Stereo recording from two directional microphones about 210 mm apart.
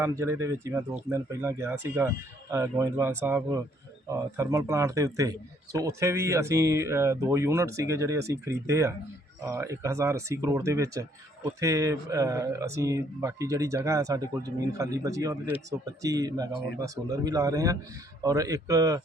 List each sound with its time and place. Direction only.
0.0 s speech: 15° right (ahead or behind)